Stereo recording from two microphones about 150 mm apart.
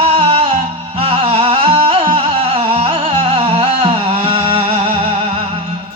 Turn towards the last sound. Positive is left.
turn(degrees=-35)  # may be behind; listen again after turning